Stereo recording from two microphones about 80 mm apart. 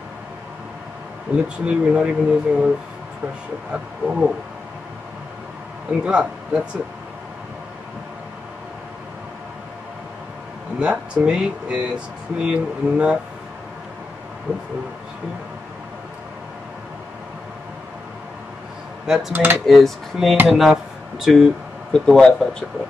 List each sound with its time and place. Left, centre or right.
1.3 s speech: centre
3.7 s speech: centre
6.0 s speech: centre
10.8 s speech: centre
19.0 s speech: centre
19.3 s speech: right
19.6 s speech: centre